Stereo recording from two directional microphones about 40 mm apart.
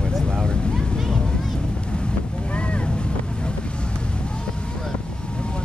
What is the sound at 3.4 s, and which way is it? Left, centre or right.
Vehicle, left.